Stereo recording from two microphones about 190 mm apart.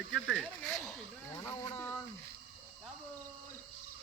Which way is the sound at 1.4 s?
15° left (ahead or behind).